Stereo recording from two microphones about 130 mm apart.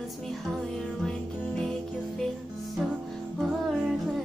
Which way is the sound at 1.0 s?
5° left (ahead or behind).